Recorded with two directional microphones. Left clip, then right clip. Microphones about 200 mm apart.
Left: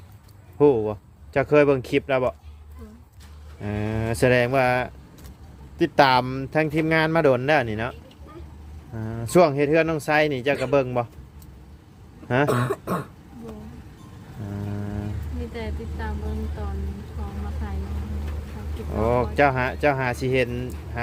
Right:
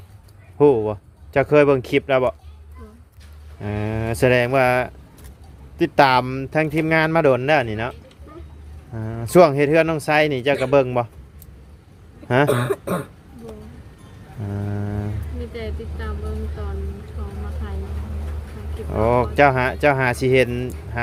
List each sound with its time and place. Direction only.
0.6 s speech: 15° right (ahead or behind)
3.6 s speech: 10° right (ahead or behind)
12.3 s speech: 20° right (ahead or behind)
14.5 s a sound: 25° right (ahead or behind)
15.5 s speech: 10° left (ahead or behind)
18.9 s speech: 25° right (ahead or behind)